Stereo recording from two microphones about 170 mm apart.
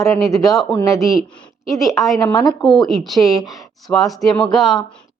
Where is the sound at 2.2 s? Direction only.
20° left (ahead or behind).